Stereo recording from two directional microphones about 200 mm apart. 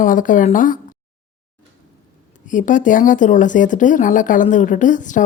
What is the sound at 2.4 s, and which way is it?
A woman's voice, 40° left (ahead or behind).